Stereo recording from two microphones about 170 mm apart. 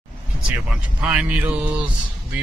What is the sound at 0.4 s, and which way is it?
Speech, 5° right (ahead or behind).